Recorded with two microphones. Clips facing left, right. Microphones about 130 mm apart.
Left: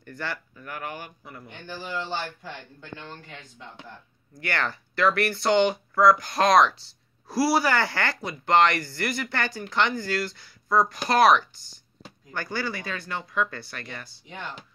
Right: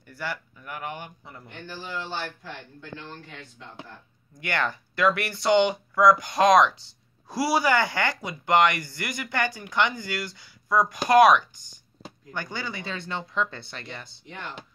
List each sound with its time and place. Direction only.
0.0 s speech: 15° right (ahead or behind)
4.3 s speech: 15° right (ahead or behind)